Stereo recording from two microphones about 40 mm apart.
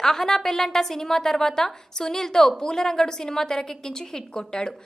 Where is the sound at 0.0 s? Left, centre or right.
Centre.